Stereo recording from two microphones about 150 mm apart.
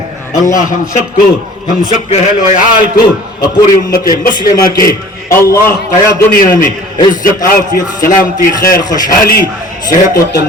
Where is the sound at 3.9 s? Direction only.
70° left (ahead or behind).